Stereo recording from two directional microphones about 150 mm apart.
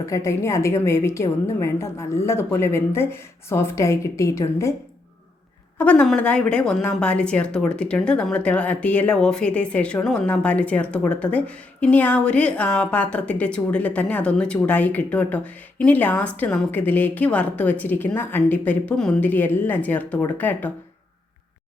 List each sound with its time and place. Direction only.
0.0 s a woman's voice: 20° left (ahead or behind)
5.8 s a woman's voice: 10° left (ahead or behind)